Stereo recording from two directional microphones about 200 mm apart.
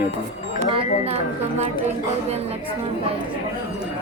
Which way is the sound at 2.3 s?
30° right (ahead or behind).